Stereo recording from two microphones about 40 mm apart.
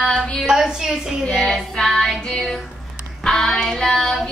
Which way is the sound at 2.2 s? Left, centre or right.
Centre.